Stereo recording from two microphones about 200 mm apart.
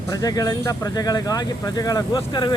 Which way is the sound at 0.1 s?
20° left (ahead or behind).